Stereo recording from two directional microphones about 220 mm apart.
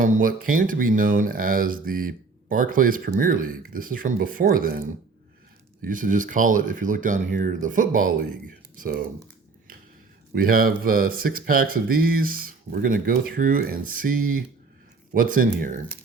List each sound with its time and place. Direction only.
0.0 s speech: 40° right (ahead or behind)
5.8 s speech: 35° right (ahead or behind)
10.3 s speech: 40° right (ahead or behind)